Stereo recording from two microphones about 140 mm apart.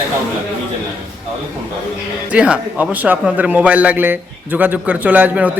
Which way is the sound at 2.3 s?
10° right (ahead or behind).